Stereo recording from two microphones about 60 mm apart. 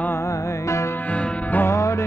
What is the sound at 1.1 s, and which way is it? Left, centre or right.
Music, left.